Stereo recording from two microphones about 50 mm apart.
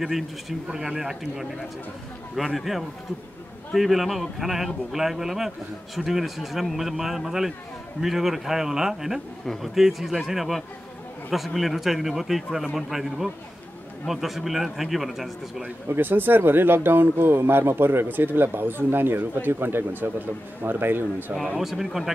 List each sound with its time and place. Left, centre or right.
0.0 s speech: centre
15.9 s speech: right
21.5 s speech: centre